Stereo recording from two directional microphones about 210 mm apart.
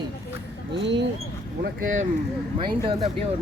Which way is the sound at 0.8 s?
55° right (ahead or behind).